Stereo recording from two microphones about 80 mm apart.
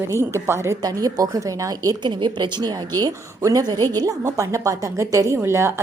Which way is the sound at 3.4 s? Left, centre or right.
Right.